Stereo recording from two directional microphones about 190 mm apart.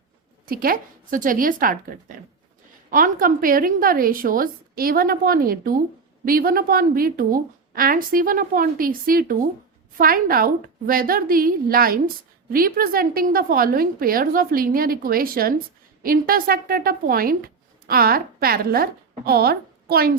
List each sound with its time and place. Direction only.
0.4 s a woman's voice: 50° right (ahead or behind)